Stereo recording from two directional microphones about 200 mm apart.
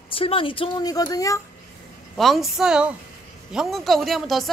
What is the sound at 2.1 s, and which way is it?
Speech, centre (ahead or behind).